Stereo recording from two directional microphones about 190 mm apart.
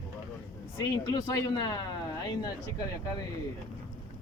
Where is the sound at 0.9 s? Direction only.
20° left (ahead or behind).